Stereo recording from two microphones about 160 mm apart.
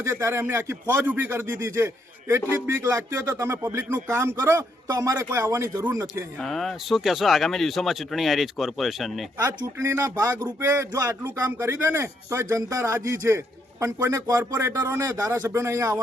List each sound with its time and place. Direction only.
0.0 s speech: 15° right (ahead or behind)
6.4 s speech: centre (ahead or behind)
9.4 s speech: 20° right (ahead or behind)